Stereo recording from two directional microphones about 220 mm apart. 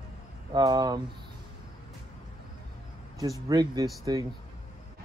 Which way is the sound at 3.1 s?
15° right (ahead or behind).